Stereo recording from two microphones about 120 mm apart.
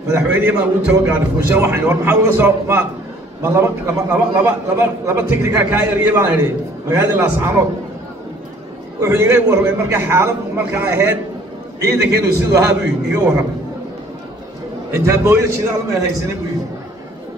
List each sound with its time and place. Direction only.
0.1 s a man's voice: 15° right (ahead or behind)
9.0 s a man's voice: 20° right (ahead or behind)
15.0 s a man's voice: 20° right (ahead or behind)